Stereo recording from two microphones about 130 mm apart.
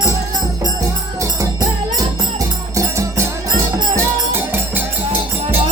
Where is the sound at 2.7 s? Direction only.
25° right (ahead or behind).